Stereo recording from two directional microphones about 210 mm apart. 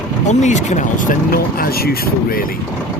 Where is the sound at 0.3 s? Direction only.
35° left (ahead or behind).